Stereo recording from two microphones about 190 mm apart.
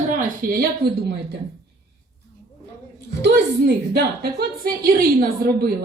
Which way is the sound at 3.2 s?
60° right (ahead or behind).